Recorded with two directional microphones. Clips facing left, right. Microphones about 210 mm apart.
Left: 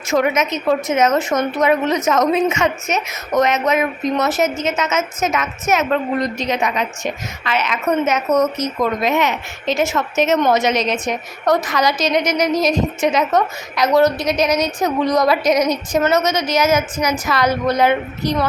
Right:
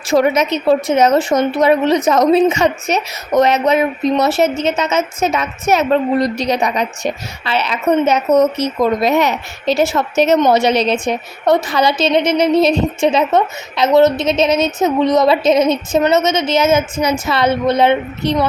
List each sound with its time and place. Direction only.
0.1 s a woman's voice: 35° right (ahead or behind)